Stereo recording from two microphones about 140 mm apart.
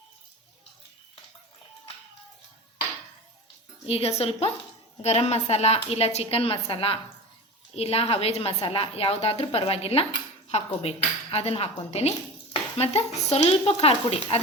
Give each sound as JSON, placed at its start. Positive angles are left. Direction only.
{"t": 3.8, "sound": "a woman's voice", "side_deg": 45}